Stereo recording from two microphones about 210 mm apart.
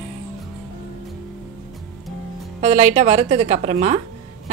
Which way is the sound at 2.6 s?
35° right (ahead or behind).